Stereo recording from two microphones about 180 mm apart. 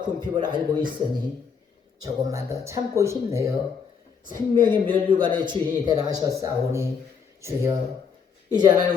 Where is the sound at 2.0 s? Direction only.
15° right (ahead or behind).